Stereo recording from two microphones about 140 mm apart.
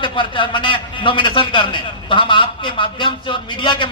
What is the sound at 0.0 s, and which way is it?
A man's voice, 35° left (ahead or behind).